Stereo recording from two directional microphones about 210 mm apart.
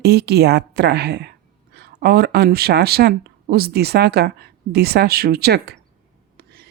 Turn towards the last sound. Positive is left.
turn(degrees=-50)  # may be behind; listen again after turning